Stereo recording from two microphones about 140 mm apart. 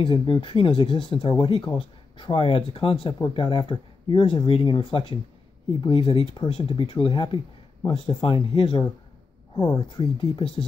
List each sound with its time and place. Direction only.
0.0 s speech: 35° left (ahead or behind)